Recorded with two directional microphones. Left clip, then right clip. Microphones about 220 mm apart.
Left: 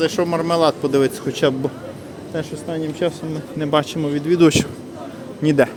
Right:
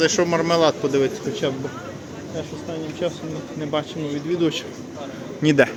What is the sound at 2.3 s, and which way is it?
Speech, 40° left (ahead or behind).